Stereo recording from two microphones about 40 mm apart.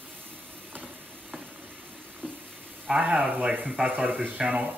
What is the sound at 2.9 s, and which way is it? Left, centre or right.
Speech, centre.